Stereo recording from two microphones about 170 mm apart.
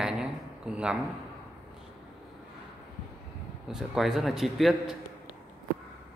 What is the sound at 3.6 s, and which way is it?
A man's voice, centre (ahead or behind).